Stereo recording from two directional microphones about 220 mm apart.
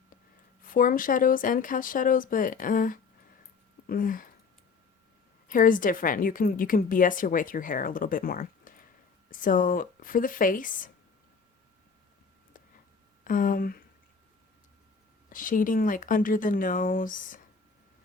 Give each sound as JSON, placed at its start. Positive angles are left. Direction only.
{"t": 0.6, "sound": "a woman's voice", "side_deg": 40}
{"t": 5.5, "sound": "a woman's voice", "side_deg": 40}
{"t": 13.2, "sound": "speech", "side_deg": 40}
{"t": 15.3, "sound": "a woman's voice", "side_deg": 40}